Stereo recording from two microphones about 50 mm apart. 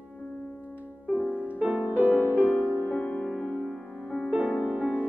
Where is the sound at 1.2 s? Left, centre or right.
Left.